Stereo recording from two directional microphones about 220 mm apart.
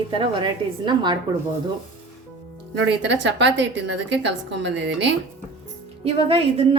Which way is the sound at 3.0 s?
55° right (ahead or behind).